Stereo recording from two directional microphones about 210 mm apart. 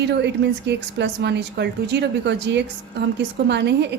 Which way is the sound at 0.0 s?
55° right (ahead or behind).